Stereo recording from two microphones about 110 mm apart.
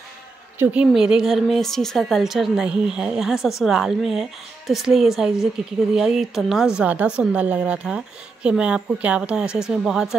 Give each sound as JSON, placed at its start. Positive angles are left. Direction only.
{"t": 0.6, "sound": "a woman's voice", "side_deg": -10}